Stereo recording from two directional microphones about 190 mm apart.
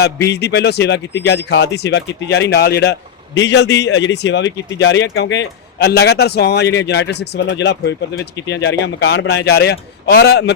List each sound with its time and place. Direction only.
0.3 s speech: 60° left (ahead or behind)